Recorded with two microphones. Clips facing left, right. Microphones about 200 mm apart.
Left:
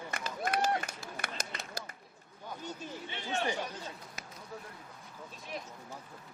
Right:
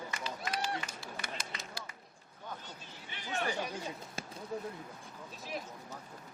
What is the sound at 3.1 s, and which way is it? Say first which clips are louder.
Chatter: left 2 dB; 25° left (ahead or behind).